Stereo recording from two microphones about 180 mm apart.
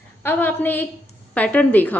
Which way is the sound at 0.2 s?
10° left (ahead or behind).